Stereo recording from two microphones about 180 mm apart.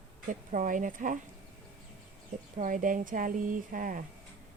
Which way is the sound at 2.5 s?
45° right (ahead or behind).